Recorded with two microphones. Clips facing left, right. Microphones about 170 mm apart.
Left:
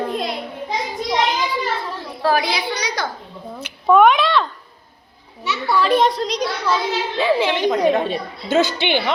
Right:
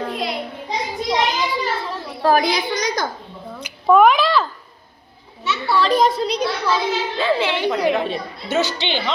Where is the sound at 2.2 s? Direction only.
45° right (ahead or behind).